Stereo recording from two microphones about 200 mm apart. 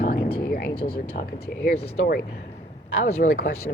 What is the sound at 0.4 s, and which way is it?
Vehicle, 50° left (ahead or behind).